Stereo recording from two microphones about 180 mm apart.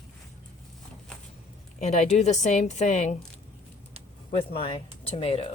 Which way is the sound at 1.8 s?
40° left (ahead or behind).